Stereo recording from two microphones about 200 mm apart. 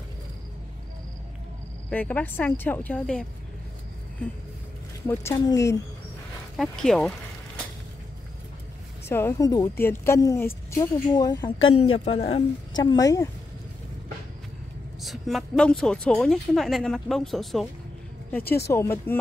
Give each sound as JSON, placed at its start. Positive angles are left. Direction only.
{"t": 1.9, "sound": "a woman's voice", "side_deg": 5}
{"t": 5.0, "sound": "a woman's voice", "side_deg": 15}
{"t": 6.5, "sound": "a woman's voice", "side_deg": 0}
{"t": 9.1, "sound": "a woman's voice", "side_deg": 10}
{"t": 11.7, "sound": "a woman's voice", "side_deg": 30}
{"t": 15.0, "sound": "a woman's voice", "side_deg": 0}
{"t": 18.7, "sound": "a woman's voice", "side_deg": 15}